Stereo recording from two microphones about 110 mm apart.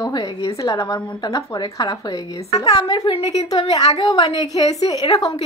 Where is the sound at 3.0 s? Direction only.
65° left (ahead or behind).